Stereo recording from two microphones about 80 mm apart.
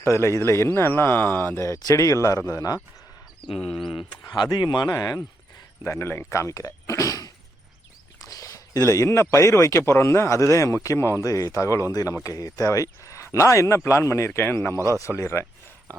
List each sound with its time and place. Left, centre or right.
0.0 s speech: left
1.6 s speech: left
3.6 s speech: centre
4.2 s speech: left
5.8 s speech: left
8.3 s a sound: left
8.8 s speech: left